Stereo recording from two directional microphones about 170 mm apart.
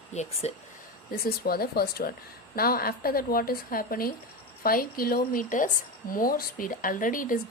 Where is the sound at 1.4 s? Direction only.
65° left (ahead or behind).